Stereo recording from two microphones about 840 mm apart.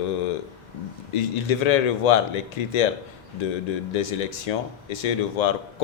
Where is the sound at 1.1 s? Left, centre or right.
Left.